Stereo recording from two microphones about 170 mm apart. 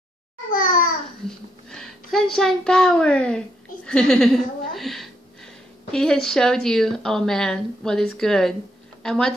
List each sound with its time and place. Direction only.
0.5 s babbling: 55° left (ahead or behind)
1.7 s a woman's voice: centre (ahead or behind)